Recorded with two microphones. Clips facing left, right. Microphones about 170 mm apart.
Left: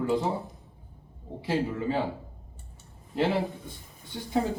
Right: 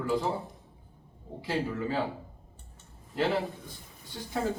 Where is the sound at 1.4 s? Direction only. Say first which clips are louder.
Left 3 dB; 25° left (ahead or behind).